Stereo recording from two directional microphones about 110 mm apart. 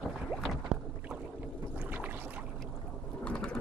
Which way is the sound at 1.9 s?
15° right (ahead or behind).